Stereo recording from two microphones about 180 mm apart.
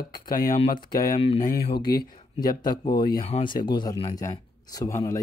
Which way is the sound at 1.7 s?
55° left (ahead or behind).